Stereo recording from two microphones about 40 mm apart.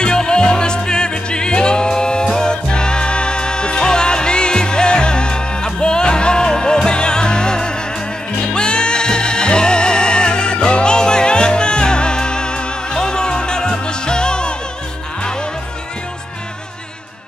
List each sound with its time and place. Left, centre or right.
0.0 s music: left